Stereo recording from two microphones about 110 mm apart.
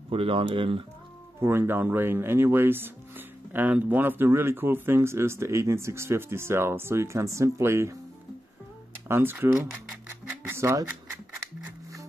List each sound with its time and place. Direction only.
0.1 s speech: 55° right (ahead or behind)
1.4 s speech: 20° right (ahead or behind)
8.9 s speech: 20° right (ahead or behind)
10.2 s music: 20° right (ahead or behind)